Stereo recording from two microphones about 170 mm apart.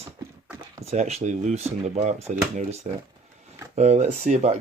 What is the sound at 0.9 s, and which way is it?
Speech, 40° right (ahead or behind).